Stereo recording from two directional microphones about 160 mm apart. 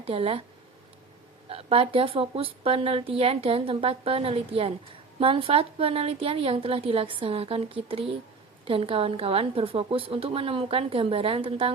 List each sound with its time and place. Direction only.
0.0 s a woman's voice: 35° right (ahead or behind)
1.5 s a woman's voice: 35° right (ahead or behind)